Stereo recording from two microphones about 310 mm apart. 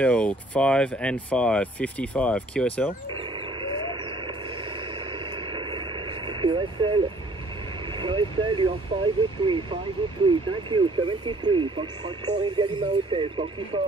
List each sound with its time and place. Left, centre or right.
0.0 s speech: centre
3.2 s vehicle: centre
4.9 s radio: centre
7.9 s speech: centre